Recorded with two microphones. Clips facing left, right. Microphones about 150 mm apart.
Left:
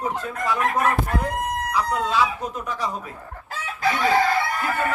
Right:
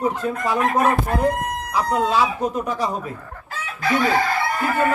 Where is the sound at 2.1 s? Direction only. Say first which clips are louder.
Right 3 dB; 40° right (ahead or behind).